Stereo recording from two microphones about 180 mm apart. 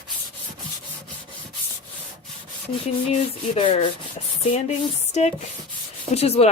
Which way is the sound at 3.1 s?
35° left (ahead or behind).